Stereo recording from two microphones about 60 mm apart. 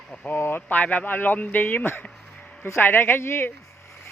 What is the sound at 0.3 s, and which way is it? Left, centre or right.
Speech, left.